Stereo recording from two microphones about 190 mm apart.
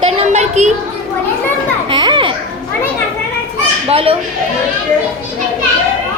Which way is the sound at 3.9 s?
30° right (ahead or behind).